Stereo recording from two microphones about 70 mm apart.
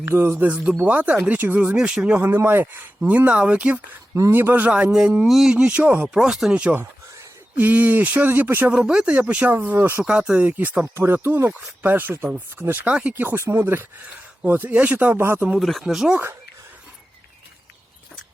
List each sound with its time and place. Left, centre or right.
0.1 s speech: right
1.6 s speech: centre
2.1 s speech: right
4.3 s speech: right
4.7 s speech: centre
6.1 s speech: centre
6.5 s speech: centre
8.7 s speech: centre; by 10.0 s right
10.0 s speech: centre
10.9 s speech: right
11.5 s speech: right
12.9 s speech: centre
13.1 s speech: right
15.5 s speech: centre